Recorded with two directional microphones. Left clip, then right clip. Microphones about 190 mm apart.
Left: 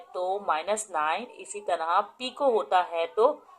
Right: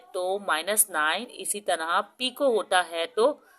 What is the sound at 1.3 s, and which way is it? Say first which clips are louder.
Speech: right 2 dB; 55° right (ahead or behind).